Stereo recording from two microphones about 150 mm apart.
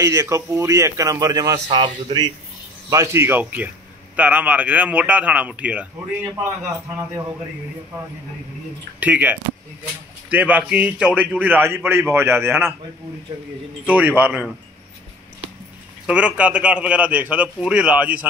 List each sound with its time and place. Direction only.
0.0 s speech: 20° right (ahead or behind)
2.9 s a man's voice: 20° right (ahead or behind)
9.0 s a man's voice: 10° right (ahead or behind)
13.8 s a man's voice: 10° right (ahead or behind)
16.1 s a man's voice: 10° right (ahead or behind)